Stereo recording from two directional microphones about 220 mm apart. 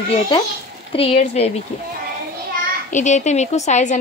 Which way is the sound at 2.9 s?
35° left (ahead or behind).